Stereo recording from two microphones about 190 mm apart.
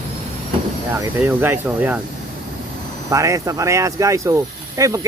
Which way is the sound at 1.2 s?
10° right (ahead or behind).